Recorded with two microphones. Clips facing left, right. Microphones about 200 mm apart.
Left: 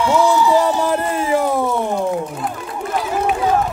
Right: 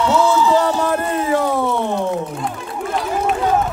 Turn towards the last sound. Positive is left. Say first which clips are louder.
# even
turn(degrees=5)  # may be behind; listen again after turning